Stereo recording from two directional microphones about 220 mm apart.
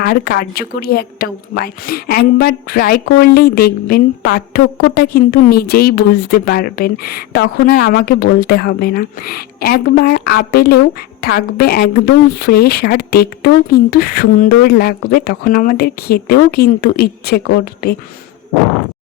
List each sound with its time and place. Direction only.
0.0 s a woman's voice: 45° left (ahead or behind)